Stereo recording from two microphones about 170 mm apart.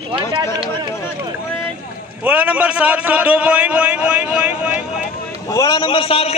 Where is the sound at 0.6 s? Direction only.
25° right (ahead or behind).